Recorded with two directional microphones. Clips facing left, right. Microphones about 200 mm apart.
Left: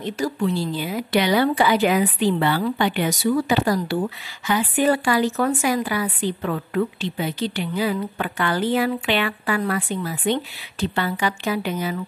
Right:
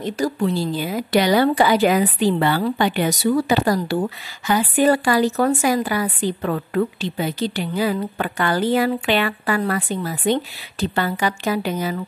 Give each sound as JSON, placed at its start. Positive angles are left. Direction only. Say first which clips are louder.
{"t": 0.0, "sound": "a woman's voice", "louder": "right 2 dB", "side_deg": -40}